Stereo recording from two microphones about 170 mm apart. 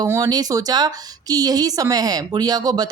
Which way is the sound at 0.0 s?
20° right (ahead or behind).